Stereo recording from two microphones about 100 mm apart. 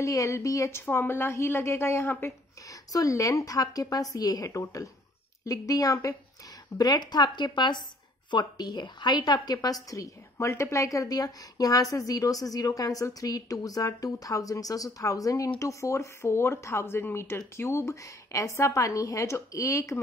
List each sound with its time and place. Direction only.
0.0 s a woman's voice: 30° left (ahead or behind)
2.9 s a woman's voice: 35° left (ahead or behind)